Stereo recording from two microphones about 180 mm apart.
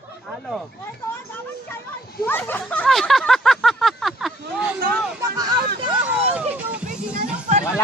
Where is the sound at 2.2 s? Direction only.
10° left (ahead or behind).